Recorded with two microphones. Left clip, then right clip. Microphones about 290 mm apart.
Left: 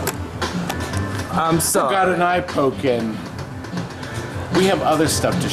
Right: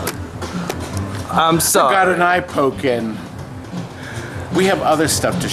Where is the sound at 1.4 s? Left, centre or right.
Centre.